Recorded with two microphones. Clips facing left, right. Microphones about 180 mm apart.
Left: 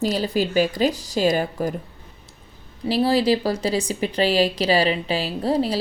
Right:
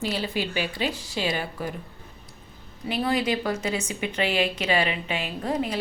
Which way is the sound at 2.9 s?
35° left (ahead or behind).